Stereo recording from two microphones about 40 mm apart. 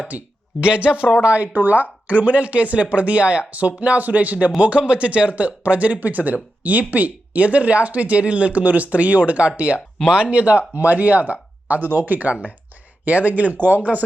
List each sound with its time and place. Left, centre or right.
0.1 s speech: right
0.6 s speech: right
1.5 s speech: right
4.5 s speech: right
11.8 s speech: right
12.3 s speech: right